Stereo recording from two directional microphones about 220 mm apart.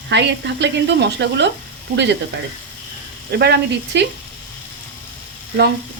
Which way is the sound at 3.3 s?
50° right (ahead or behind).